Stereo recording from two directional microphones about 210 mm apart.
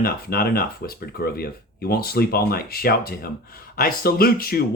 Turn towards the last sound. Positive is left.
turn(degrees=45)  # may be behind; listen again after turning